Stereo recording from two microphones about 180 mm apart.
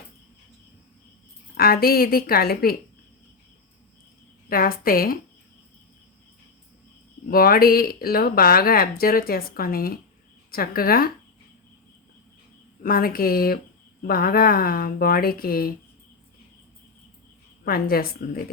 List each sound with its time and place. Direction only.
1.5 s speech: 55° left (ahead or behind)
4.4 s a woman's voice: 55° left (ahead or behind)
7.3 s speech: 55° left (ahead or behind)
12.8 s speech: 55° left (ahead or behind)
17.7 s speech: 55° left (ahead or behind)